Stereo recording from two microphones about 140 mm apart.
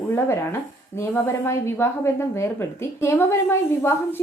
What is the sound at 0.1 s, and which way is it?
Speech, 20° left (ahead or behind).